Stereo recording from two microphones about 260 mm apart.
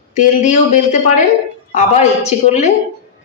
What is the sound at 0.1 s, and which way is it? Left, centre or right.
Speech, left.